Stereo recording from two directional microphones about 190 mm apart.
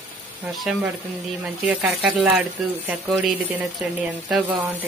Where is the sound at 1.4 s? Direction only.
5° right (ahead or behind).